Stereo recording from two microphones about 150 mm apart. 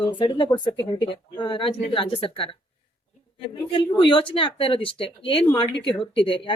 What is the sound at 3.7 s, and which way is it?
Speech, 35° left (ahead or behind).